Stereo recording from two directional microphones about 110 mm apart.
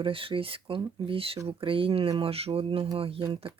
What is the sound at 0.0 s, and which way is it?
Speech, 55° right (ahead or behind).